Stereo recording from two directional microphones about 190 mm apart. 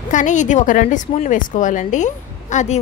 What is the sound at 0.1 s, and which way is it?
A woman's voice, 40° left (ahead or behind).